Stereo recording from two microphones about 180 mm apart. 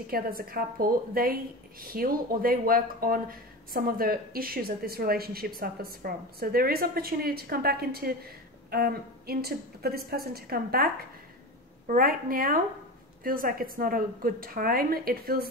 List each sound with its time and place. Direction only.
0.0 s a woman's voice: 55° right (ahead or behind)
11.9 s a woman's voice: 50° right (ahead or behind)